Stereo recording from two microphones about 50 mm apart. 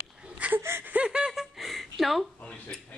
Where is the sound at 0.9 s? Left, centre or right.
Centre.